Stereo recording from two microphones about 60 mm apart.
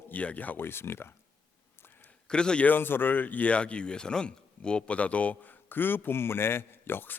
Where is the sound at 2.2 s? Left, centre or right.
Centre.